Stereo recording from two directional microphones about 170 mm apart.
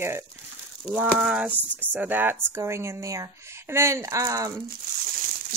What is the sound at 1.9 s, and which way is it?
A woman's voice, 10° right (ahead or behind).